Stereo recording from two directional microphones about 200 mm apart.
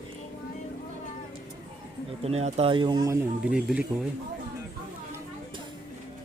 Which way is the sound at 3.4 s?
5° right (ahead or behind).